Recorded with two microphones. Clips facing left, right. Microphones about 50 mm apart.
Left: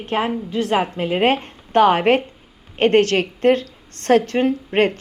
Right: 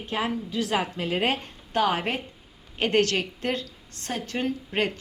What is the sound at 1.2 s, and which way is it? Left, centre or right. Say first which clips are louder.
A woman's voice: left 9 dB; left.